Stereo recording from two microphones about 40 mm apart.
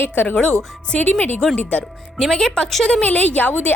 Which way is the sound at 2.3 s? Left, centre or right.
Centre.